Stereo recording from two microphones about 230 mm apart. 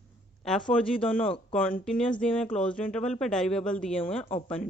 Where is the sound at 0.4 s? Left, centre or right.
Centre.